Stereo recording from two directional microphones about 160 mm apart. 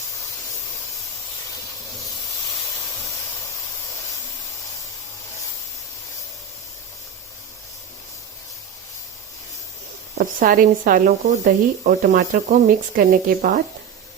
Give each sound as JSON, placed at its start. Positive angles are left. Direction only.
{"t": 10.2, "sound": "speech", "side_deg": -60}